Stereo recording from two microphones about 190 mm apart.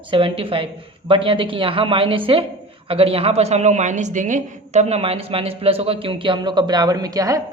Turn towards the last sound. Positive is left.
turn(degrees=-20)  # may be behind; listen again after turning